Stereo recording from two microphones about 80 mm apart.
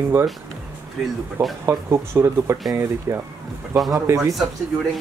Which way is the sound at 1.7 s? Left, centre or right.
Right.